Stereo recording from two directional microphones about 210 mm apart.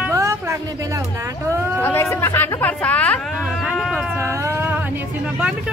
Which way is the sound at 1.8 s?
10° left (ahead or behind).